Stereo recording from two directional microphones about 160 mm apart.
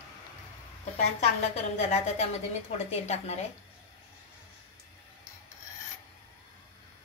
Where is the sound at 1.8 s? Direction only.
40° left (ahead or behind).